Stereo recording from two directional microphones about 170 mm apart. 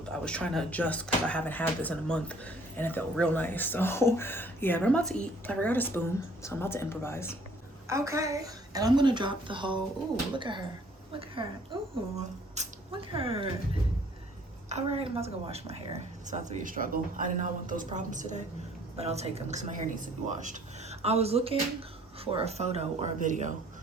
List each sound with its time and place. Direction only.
0.0 s speech: 5° left (ahead or behind)
7.9 s a woman's voice: 15° right (ahead or behind); by 13.5 s 35° right (ahead or behind)
14.7 s a woman's voice: 40° right (ahead or behind)